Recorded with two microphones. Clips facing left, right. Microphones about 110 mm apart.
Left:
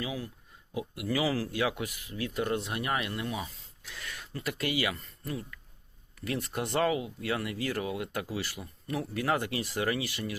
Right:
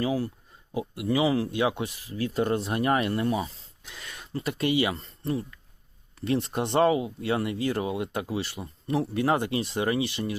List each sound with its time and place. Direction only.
0.0 s speech: 40° right (ahead or behind)
3.8 s speech: 20° right (ahead or behind)